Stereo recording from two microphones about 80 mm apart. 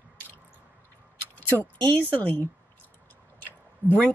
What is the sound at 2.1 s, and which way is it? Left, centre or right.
Speech, left.